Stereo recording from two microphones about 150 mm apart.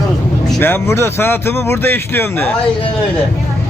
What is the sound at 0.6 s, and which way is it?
Speech, 15° left (ahead or behind).